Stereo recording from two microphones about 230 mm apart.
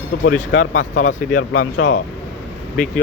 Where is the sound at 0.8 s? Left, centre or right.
Left.